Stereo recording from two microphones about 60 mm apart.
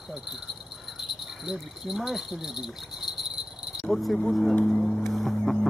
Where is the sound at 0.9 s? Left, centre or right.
Centre.